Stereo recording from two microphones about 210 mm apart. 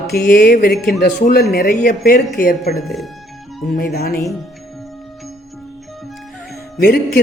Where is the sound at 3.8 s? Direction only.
45° left (ahead or behind).